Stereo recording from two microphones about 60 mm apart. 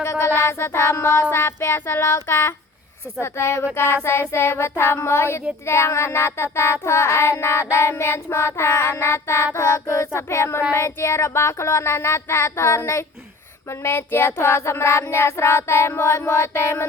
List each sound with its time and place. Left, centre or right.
0.0 s music: left
0.3 s child singing: left